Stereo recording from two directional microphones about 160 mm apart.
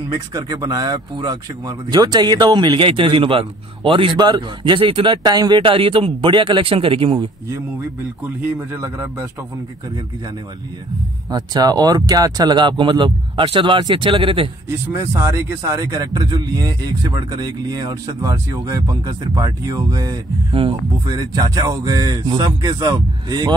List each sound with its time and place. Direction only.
0.1 s a man's voice: 25° right (ahead or behind)
8.4 s a man's voice: 15° right (ahead or behind)
11.2 s a man's voice: 25° right (ahead or behind)
15.0 s a man's voice: 20° right (ahead or behind)